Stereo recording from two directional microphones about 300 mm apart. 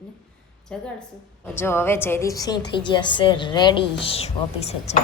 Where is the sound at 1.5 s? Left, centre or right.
Centre.